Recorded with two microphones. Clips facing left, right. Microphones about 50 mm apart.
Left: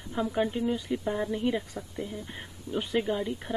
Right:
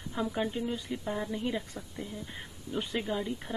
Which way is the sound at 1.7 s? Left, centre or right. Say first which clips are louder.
Left 4 dB; centre.